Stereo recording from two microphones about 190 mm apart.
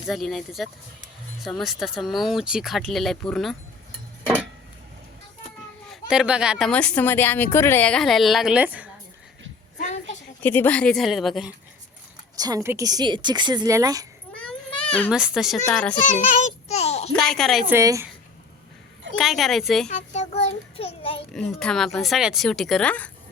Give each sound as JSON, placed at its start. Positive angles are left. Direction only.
{"t": 0.1, "sound": "a woman's voice", "side_deg": 0}
{"t": 5.9, "sound": "a woman's voice", "side_deg": -5}
{"t": 9.7, "sound": "a sound", "side_deg": 40}
{"t": 10.4, "sound": "a woman's voice", "side_deg": 10}
{"t": 12.4, "sound": "speech", "side_deg": -20}
{"t": 14.4, "sound": "baby cry", "side_deg": 5}
{"t": 15.1, "sound": "a woman's voice", "side_deg": -5}
{"t": 16.0, "sound": "a sound", "side_deg": 45}
{"t": 17.2, "sound": "a woman's voice", "side_deg": 0}
{"t": 17.7, "sound": "a woman's voice", "side_deg": -15}
{"t": 19.1, "sound": "a woman's voice", "side_deg": 0}
{"t": 19.9, "sound": "a child's voice", "side_deg": 40}
{"t": 21.3, "sound": "a woman's voice", "side_deg": 5}